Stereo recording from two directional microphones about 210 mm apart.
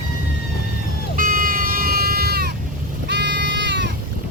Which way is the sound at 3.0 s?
55° right (ahead or behind).